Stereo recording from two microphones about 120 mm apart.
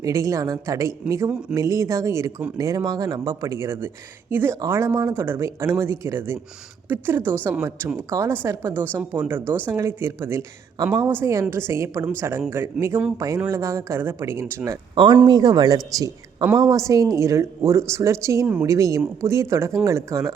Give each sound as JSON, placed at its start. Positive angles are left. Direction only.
{"t": 0.0, "sound": "speech", "side_deg": -25}
{"t": 8.7, "sound": "speech", "side_deg": 10}
{"t": 9.0, "sound": "speech", "side_deg": -15}
{"t": 14.9, "sound": "speech", "side_deg": -40}